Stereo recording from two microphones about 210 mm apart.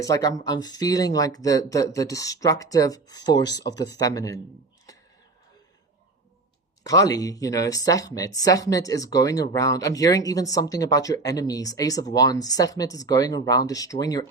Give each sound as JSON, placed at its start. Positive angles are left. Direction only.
{"t": 0.0, "sound": "speech", "side_deg": 15}
{"t": 6.8, "sound": "speech", "side_deg": 15}